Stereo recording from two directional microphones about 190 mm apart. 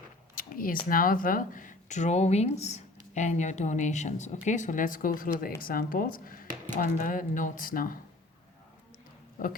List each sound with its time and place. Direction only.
0.3 s a sound: 45° left (ahead or behind)
0.9 s speech: 45° left (ahead or behind)
9.4 s speech: 45° left (ahead or behind)